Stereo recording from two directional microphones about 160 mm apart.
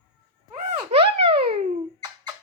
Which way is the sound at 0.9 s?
35° right (ahead or behind).